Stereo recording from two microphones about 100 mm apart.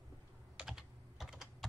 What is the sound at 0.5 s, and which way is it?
Computer keyboard, 5° right (ahead or behind).